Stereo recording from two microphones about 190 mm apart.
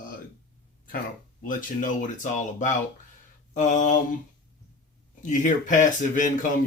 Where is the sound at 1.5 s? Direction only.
45° left (ahead or behind).